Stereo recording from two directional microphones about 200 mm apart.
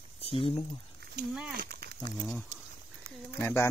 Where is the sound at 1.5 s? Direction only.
50° right (ahead or behind).